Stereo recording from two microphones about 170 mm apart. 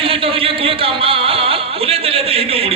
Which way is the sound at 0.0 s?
35° right (ahead or behind).